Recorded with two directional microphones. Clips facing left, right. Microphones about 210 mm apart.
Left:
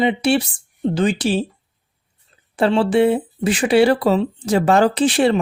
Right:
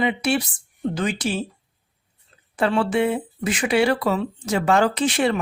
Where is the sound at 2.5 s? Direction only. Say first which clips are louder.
Left 5 dB; 30° left (ahead or behind).